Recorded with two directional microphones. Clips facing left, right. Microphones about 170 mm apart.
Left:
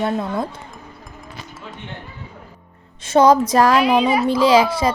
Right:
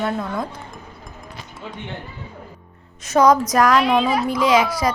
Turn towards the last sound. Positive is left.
turn(degrees=30)  # may be behind; listen again after turning